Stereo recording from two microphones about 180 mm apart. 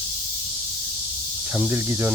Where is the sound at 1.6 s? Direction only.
10° right (ahead or behind).